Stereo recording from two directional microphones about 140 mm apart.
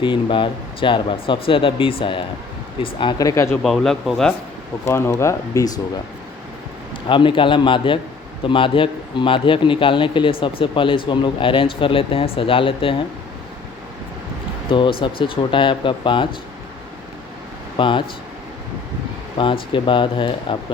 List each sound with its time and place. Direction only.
0.0 s a man's voice: 35° left (ahead or behind)
3.5 s speech: centre (ahead or behind)
4.9 s speech: 20° left (ahead or behind)
7.1 s a man's voice: 35° left (ahead or behind)
14.7 s a man's voice: 35° left (ahead or behind)
17.7 s speech: 35° left (ahead or behind)
19.4 s a man's voice: 35° left (ahead or behind)